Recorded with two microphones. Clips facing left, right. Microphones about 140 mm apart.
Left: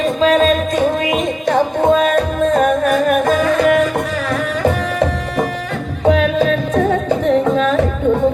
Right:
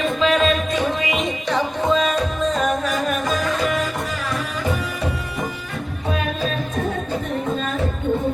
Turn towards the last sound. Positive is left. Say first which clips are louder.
# left 10 dB
turn(degrees=90)